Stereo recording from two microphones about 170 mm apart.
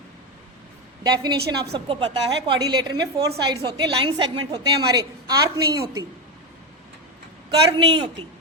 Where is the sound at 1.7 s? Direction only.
30° right (ahead or behind).